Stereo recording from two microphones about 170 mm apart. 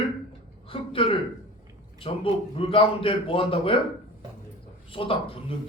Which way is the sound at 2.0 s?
30° left (ahead or behind).